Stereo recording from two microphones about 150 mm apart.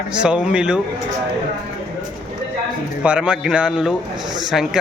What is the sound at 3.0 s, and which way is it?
A man's voice, 5° right (ahead or behind).